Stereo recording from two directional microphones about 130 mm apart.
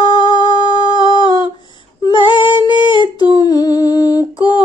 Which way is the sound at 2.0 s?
35° left (ahead or behind).